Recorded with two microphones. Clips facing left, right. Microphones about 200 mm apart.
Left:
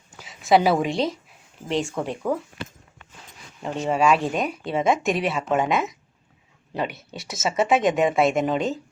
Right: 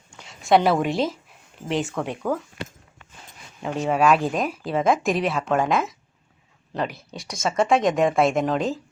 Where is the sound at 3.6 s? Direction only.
Centre (ahead or behind).